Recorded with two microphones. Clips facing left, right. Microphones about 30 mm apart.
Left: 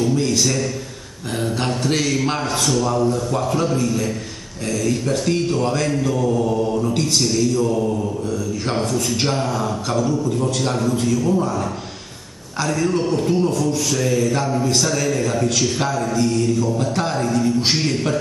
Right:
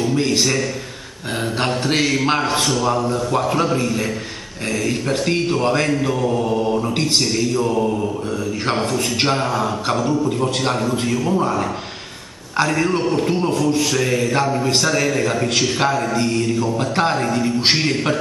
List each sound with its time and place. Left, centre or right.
0.0 s speech: right